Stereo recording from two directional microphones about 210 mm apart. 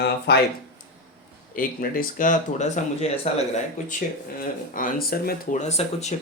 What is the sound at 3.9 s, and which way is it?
Speech, 40° left (ahead or behind).